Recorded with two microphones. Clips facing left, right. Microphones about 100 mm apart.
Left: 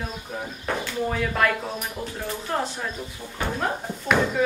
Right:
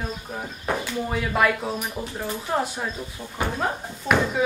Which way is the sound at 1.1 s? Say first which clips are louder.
Right 2 dB; 10° right (ahead or behind).